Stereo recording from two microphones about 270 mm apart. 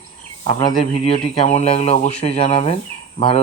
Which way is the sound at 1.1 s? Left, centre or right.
Left.